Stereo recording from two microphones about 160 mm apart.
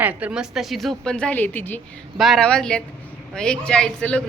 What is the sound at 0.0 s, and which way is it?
A woman's voice, 10° right (ahead or behind).